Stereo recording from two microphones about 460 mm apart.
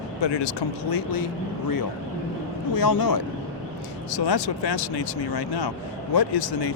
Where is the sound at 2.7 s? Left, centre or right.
Left.